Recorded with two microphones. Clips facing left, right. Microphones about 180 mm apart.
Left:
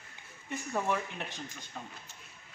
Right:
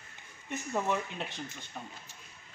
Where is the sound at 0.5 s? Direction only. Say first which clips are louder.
Right 1 dB; 15° right (ahead or behind).